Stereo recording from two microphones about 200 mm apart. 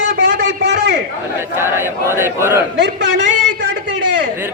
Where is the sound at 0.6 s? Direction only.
65° right (ahead or behind).